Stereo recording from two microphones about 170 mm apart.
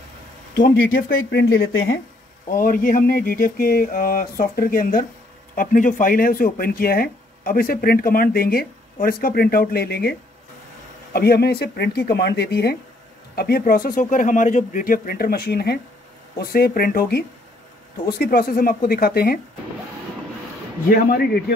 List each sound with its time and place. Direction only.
0.6 s speech: 65° left (ahead or behind)
2.5 s speech: 55° left (ahead or behind)
11.1 s speech: 70° left (ahead or behind)
20.9 s speech: 60° left (ahead or behind)